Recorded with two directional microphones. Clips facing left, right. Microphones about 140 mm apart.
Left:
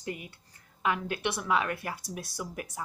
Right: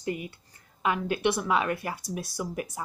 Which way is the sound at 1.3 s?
20° right (ahead or behind).